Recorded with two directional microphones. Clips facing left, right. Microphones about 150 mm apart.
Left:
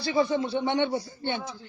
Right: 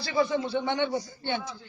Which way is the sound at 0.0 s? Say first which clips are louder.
Left 2 dB; 20° left (ahead or behind).